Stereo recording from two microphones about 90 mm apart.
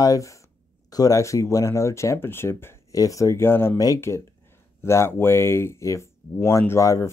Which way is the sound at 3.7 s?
40° left (ahead or behind).